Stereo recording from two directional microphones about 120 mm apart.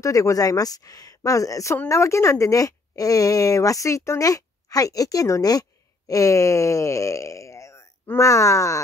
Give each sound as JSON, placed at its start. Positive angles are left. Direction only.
{"t": 0.0, "sound": "speech", "side_deg": 30}